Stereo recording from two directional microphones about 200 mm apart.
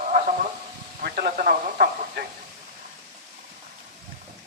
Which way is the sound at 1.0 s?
50° right (ahead or behind).